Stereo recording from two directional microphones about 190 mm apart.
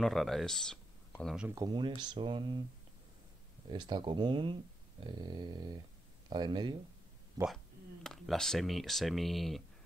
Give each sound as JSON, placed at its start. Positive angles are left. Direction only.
{"t": 0.0, "sound": "speech", "side_deg": 0}
{"t": 1.5, "sound": "speech", "side_deg": -20}
{"t": 3.6, "sound": "speech", "side_deg": -25}
{"t": 7.4, "sound": "speech", "side_deg": 0}